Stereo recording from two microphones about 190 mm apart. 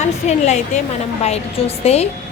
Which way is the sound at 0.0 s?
35° left (ahead or behind).